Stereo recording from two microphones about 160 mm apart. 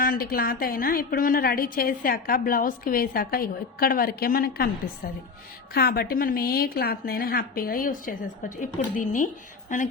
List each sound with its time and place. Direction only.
0.0 s a woman's voice: 65° left (ahead or behind)
5.7 s a woman's voice: 75° left (ahead or behind); by 9.9 s 55° left (ahead or behind)